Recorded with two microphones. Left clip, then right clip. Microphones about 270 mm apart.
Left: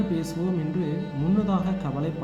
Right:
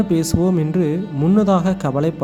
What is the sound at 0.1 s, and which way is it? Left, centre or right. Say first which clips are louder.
Speech: right 10 dB; right.